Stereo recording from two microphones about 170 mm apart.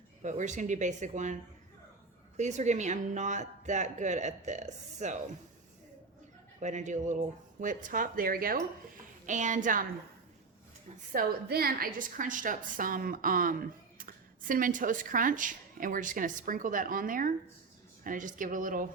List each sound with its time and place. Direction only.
0.2 s a woman's voice: 45° right (ahead or behind)
6.6 s a woman's voice: 45° right (ahead or behind)
9.2 s a woman's voice: 45° right (ahead or behind)
11.1 s a woman's voice: 60° right (ahead or behind)